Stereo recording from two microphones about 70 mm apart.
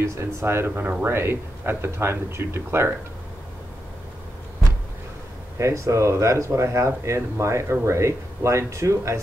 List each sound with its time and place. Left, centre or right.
0.0 s speech: right
5.6 s speech: right